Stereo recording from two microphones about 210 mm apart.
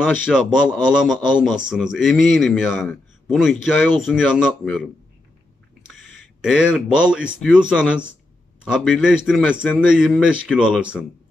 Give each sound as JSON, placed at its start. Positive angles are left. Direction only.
{"t": 0.2, "sound": "a man's voice", "side_deg": -5}
{"t": 5.9, "sound": "a man's voice", "side_deg": 0}